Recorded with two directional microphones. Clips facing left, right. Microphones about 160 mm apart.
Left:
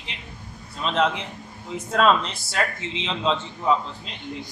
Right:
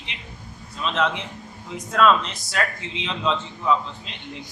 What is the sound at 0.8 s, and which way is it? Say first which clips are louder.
A man's voice: left 1 dB; 35° left (ahead or behind).